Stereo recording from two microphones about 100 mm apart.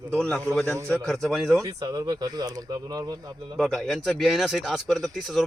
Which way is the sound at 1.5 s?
35° right (ahead or behind).